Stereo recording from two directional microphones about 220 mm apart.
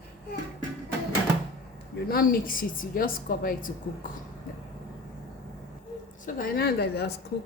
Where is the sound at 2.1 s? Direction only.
40° left (ahead or behind).